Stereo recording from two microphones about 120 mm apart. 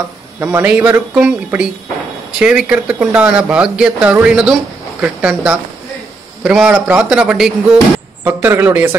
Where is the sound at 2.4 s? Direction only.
10° right (ahead or behind).